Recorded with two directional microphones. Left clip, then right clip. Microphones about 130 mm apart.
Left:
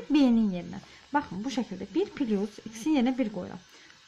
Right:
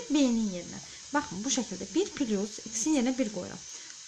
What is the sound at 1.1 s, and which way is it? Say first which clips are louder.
Speech: left 1 dB; 5° left (ahead or behind).